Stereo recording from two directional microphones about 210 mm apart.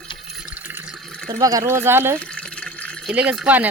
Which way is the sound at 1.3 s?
15° right (ahead or behind).